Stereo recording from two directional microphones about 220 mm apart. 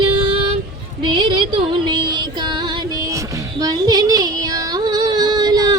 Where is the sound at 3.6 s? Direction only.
15° right (ahead or behind).